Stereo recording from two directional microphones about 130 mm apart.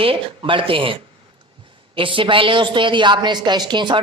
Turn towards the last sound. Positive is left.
turn(degrees=-35)  # may be behind; listen again after turning